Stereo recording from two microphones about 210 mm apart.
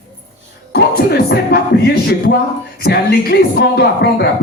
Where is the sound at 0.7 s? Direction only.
50° left (ahead or behind).